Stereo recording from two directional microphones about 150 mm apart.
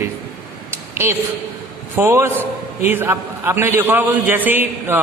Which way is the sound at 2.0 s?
15° right (ahead or behind).